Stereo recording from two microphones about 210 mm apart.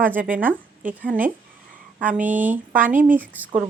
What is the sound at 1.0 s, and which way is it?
Speech, 5° right (ahead or behind).